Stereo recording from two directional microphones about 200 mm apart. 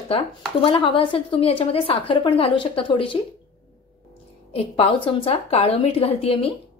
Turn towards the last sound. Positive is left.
turn(degrees=30)  # may be behind; listen again after turning